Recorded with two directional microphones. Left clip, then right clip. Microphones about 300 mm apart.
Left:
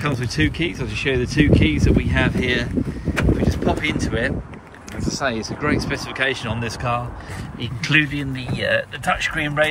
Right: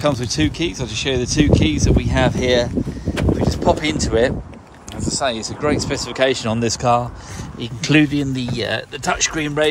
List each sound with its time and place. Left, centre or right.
0.0 s speech: centre
5.0 s speech: centre